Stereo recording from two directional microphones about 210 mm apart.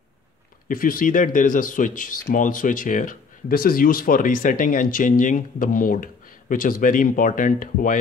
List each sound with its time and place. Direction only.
0.7 s speech: 40° left (ahead or behind)